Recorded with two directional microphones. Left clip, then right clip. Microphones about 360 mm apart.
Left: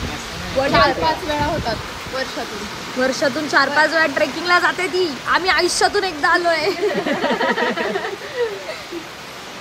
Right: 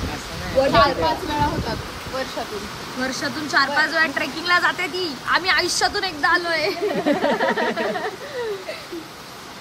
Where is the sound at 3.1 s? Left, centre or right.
Centre.